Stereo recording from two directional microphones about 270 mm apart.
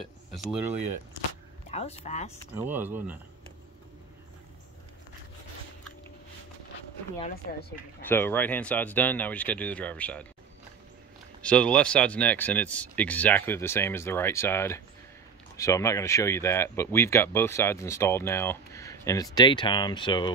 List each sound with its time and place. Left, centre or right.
0.0 s speech: centre
1.7 s speech: left
2.5 s speech: centre
8.1 s speech: centre
11.4 s speech: centre